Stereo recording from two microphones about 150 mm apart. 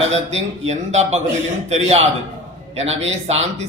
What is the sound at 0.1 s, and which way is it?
A man's voice, 45° right (ahead or behind).